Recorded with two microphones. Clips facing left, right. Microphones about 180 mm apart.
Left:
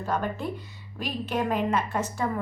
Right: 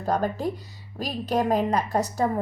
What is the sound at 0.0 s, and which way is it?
A woman's voice, 40° right (ahead or behind).